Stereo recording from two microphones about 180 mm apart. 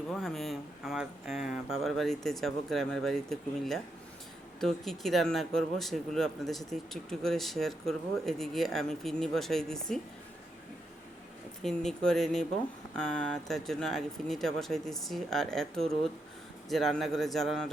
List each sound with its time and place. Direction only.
0.1 s speech: centre (ahead or behind)
11.6 s speech: 5° left (ahead or behind)